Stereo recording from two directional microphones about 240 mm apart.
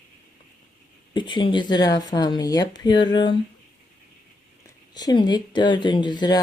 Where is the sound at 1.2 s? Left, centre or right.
Centre.